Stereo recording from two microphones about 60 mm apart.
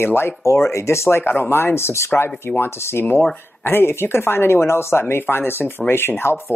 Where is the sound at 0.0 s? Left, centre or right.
Left.